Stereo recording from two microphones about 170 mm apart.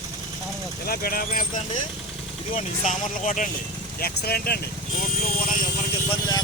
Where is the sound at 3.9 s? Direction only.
65° left (ahead or behind).